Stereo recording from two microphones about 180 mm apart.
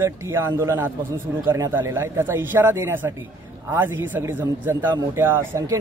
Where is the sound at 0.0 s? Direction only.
15° right (ahead or behind).